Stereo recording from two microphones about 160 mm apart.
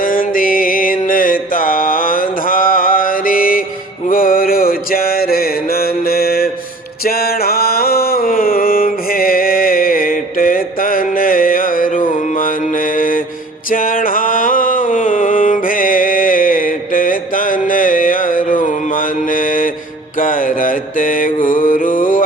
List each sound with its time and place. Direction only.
0.0 s music: 60° left (ahead or behind)
4.1 s mantra: 60° left (ahead or behind)
7.0 s a sound: 70° left (ahead or behind)
20.1 s mantra: 60° left (ahead or behind)